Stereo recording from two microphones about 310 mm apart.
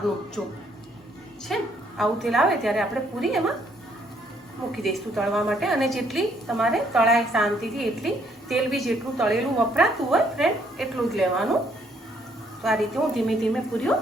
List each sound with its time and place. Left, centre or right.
0.4 s a woman's voice: centre
4.7 s a woman's voice: centre
12.6 s a woman's voice: centre